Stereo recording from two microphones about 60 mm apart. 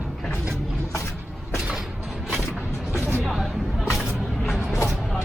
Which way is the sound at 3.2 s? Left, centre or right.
Centre.